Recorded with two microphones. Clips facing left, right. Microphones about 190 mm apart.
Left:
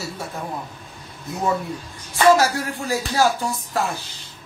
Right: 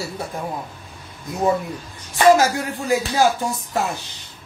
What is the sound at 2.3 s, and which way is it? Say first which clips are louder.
Speech: right 1 dB; 20° right (ahead or behind).